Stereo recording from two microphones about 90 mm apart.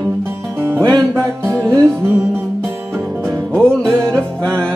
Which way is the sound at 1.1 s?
35° right (ahead or behind).